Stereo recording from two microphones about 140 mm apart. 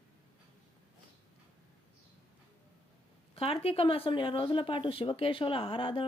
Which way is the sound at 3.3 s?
45° left (ahead or behind).